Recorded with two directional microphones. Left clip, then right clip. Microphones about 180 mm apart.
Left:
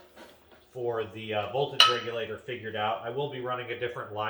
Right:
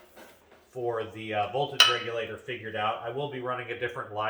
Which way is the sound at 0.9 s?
20° right (ahead or behind).